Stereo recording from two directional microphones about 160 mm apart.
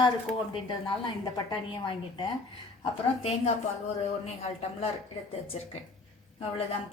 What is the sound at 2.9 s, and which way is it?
Speech, 40° left (ahead or behind).